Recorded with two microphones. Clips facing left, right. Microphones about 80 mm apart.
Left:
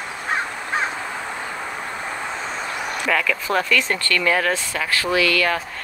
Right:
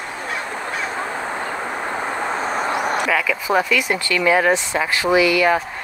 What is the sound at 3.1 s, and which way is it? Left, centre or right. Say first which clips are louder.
Speech: right 2 dB; centre.